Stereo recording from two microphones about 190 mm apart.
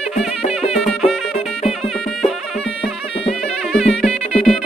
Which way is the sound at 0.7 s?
Centre (ahead or behind).